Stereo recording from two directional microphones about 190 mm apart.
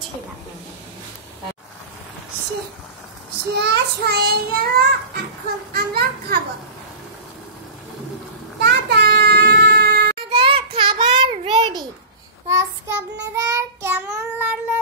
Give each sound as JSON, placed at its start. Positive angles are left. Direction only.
{"t": 3.5, "sound": "child singing", "side_deg": -60}
{"t": 5.7, "sound": "children playing", "side_deg": -55}
{"t": 8.5, "sound": "child singing", "side_deg": -60}
{"t": 10.3, "sound": "child singing", "side_deg": -30}